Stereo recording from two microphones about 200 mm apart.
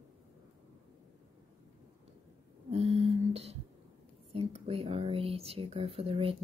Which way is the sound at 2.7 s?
30° right (ahead or behind).